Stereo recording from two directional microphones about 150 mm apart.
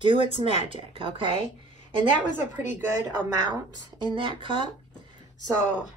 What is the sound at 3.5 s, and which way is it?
Speech, 30° right (ahead or behind).